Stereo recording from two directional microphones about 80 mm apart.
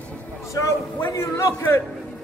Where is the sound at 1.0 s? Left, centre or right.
Left.